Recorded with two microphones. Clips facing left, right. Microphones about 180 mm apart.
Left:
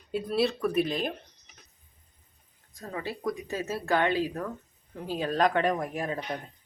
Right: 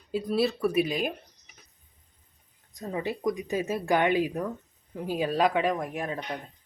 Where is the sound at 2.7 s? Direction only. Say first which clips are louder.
Right 4 dB; 20° right (ahead or behind); by 6.3 s centre (ahead or behind).